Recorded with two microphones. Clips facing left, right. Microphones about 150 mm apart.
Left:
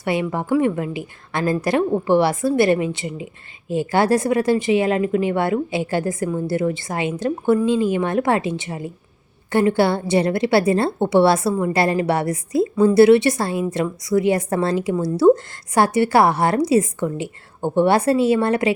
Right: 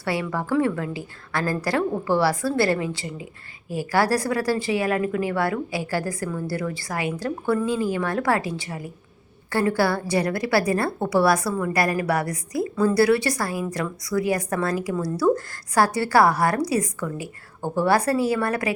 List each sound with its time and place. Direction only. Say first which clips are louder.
0.0 s a woman's voice: left 4 dB; 20° left (ahead or behind)